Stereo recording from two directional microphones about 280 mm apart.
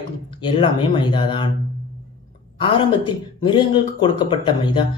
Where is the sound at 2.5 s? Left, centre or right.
Centre.